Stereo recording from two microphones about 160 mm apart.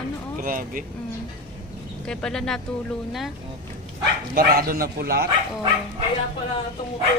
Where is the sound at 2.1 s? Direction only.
5° left (ahead or behind).